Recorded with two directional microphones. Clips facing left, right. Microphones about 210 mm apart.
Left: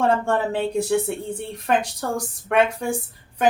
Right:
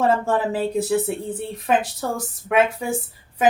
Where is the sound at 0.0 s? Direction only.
Centre (ahead or behind).